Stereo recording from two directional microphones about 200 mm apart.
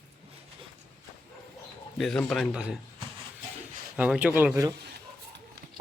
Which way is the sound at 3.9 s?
5° right (ahead or behind).